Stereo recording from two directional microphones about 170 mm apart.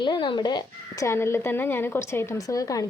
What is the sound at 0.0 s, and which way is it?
Speech, 30° left (ahead or behind).